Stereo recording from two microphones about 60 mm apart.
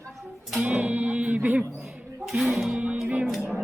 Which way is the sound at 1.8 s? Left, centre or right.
Centre.